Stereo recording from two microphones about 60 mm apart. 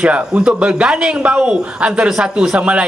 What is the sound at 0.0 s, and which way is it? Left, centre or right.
A man's voice, centre.